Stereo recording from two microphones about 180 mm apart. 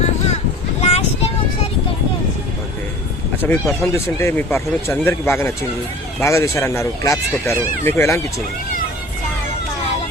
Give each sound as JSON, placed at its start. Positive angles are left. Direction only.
{"t": 0.8, "sound": "vehicle", "side_deg": 35}
{"t": 3.5, "sound": "speech", "side_deg": 15}